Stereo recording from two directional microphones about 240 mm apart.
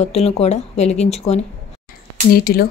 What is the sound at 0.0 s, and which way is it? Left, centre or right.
A woman's voice, left.